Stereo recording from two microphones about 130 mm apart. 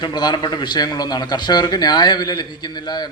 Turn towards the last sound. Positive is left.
turn(degrees=30)  # may be behind; listen again after turning